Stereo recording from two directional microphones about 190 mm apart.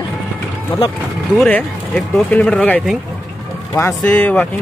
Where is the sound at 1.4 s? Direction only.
5° left (ahead or behind).